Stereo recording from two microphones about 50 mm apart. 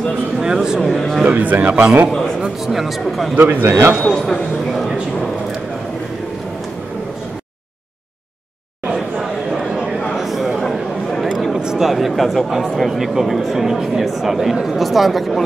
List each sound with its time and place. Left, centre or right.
0.4 s speech: centre
0.9 s speech: centre
1.2 s a man's voice: right
2.4 s speech: centre
3.3 s a man's voice: right
4.1 s a sound: centre
10.1 s a sound: centre
11.5 s a sound: centre
12.7 s speech: centre